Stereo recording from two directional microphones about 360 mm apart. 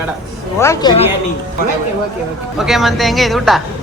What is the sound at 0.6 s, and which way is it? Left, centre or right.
Speech, centre.